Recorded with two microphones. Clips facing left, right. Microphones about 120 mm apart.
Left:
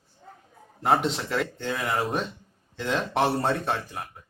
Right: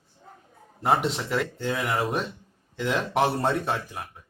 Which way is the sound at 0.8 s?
5° right (ahead or behind).